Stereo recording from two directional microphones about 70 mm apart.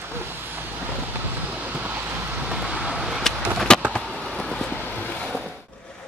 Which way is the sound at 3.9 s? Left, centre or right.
Centre.